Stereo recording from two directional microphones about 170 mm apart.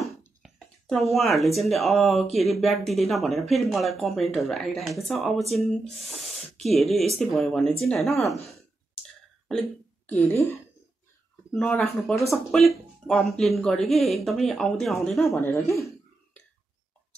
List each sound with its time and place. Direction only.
0.4 s speech: centre (ahead or behind)
9.5 s speech: 5° left (ahead or behind)
11.5 s speech: 10° left (ahead or behind)
15.3 s speech: 15° left (ahead or behind)